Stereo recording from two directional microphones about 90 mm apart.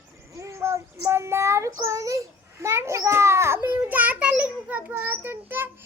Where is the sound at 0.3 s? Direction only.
30° right (ahead or behind).